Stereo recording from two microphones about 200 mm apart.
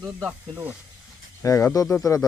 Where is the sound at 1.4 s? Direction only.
15° left (ahead or behind).